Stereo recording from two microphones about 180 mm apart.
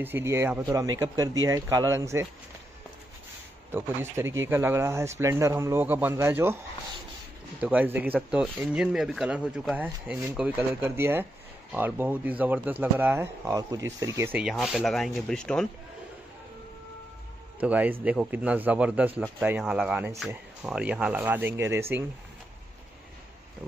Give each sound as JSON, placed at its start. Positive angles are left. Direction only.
{"t": 0.0, "sound": "speech", "side_deg": -15}
{"t": 3.7, "sound": "speech", "side_deg": -15}
{"t": 7.6, "sound": "speech", "side_deg": -10}
{"t": 17.6, "sound": "speech", "side_deg": -10}